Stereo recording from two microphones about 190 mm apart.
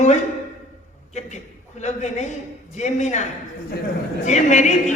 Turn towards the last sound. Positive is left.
turn(degrees=40)  # may be behind; listen again after turning